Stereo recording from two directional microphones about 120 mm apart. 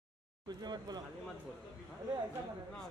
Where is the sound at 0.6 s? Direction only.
35° right (ahead or behind).